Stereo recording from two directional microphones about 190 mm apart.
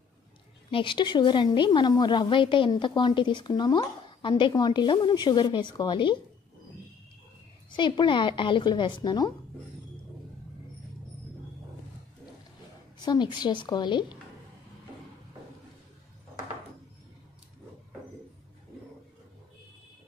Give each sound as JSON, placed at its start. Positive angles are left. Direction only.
{"t": 0.7, "sound": "speech", "side_deg": 25}
{"t": 7.7, "sound": "speech", "side_deg": 25}
{"t": 13.0, "sound": "speech", "side_deg": 20}